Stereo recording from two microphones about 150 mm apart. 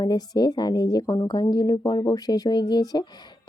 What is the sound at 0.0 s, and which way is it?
A woman's voice, 30° left (ahead or behind).